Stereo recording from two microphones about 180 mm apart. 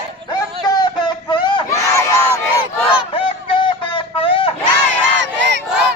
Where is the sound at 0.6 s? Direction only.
20° left (ahead or behind).